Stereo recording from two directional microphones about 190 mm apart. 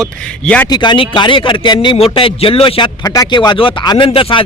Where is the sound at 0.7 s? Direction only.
25° left (ahead or behind).